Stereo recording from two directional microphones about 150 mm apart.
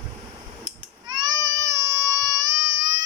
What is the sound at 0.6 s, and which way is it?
Child singing, 25° right (ahead or behind).